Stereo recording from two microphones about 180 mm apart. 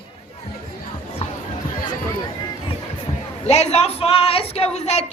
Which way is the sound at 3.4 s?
35° left (ahead or behind).